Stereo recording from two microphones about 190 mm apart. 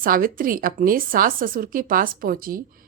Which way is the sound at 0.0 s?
50° right (ahead or behind).